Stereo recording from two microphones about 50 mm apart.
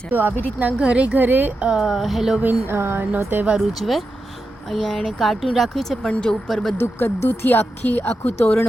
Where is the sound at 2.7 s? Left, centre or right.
Right.